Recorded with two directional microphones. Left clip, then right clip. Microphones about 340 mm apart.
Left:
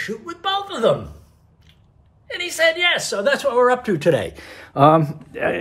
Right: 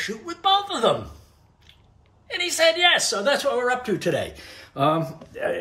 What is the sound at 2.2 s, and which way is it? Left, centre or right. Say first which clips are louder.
A woman's voice: left 1 dB; centre.